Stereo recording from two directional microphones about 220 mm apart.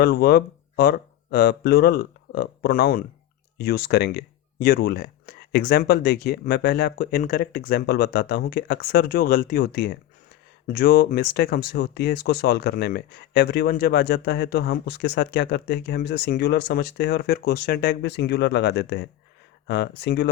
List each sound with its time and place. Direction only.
0.0 s speech: 45° left (ahead or behind)